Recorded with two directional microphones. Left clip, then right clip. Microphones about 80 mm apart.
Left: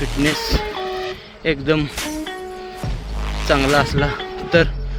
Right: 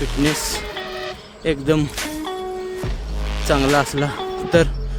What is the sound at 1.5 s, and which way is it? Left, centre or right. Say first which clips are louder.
Speech: left 1 dB; right.